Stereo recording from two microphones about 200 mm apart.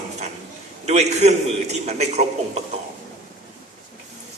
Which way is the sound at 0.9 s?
35° right (ahead or behind).